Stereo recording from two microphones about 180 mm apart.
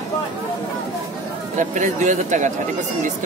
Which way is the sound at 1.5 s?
45° right (ahead or behind).